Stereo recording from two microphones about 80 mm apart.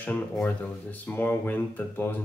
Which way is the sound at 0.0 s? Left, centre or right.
Left.